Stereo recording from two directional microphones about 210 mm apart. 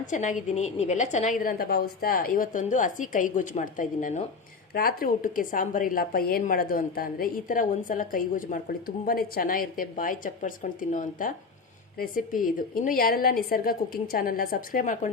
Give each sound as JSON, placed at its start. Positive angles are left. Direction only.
{"t": 0.0, "sound": "a woman's voice", "side_deg": 35}